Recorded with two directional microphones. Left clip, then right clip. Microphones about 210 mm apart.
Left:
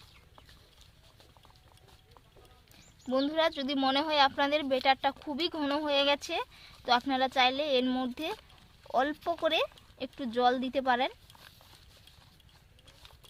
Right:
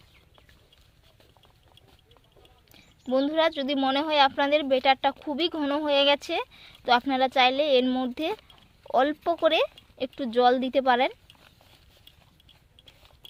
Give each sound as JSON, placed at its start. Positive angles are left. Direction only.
{"t": 2.7, "sound": "speech", "side_deg": -20}